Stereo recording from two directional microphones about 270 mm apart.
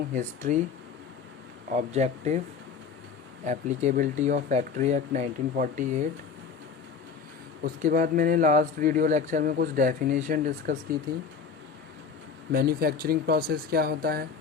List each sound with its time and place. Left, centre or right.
0.1 s speech: right
1.7 s speech: right
3.4 s speech: right
7.6 s speech: right
12.5 s speech: right